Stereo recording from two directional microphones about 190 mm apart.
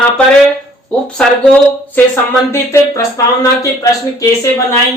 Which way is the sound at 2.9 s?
15° left (ahead or behind).